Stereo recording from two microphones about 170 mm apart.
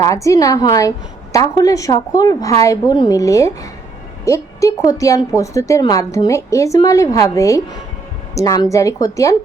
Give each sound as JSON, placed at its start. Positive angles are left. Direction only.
{"t": 0.0, "sound": "a woman's voice", "side_deg": 20}